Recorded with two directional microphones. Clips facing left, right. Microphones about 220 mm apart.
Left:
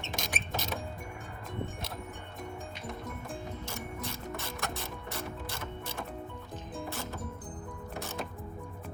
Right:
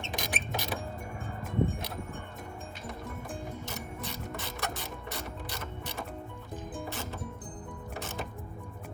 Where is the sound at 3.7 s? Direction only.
Centre (ahead or behind).